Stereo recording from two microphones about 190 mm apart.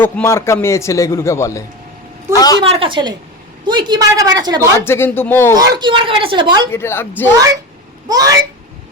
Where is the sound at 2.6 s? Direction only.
30° right (ahead or behind).